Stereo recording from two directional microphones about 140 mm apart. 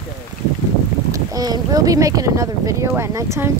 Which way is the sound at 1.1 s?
25° right (ahead or behind).